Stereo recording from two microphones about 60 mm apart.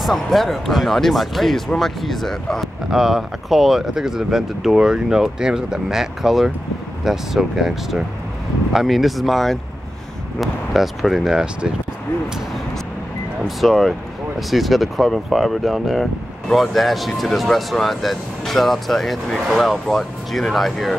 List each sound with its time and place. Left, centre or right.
0.0 s speech: centre
2.9 s speech: centre
13.6 s speech: centre